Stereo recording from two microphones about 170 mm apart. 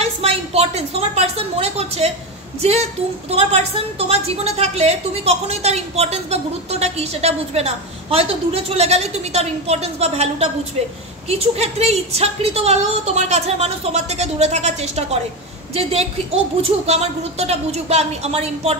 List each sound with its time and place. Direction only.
0.0 s a woman's voice: 35° right (ahead or behind)
3.3 s a woman's voice: 40° right (ahead or behind)